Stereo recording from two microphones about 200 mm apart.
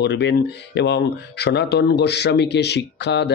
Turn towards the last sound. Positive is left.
turn(degrees=60)  # may be behind; listen again after turning